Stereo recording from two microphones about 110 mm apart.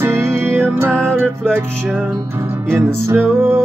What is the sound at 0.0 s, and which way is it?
Music, 25° right (ahead or behind).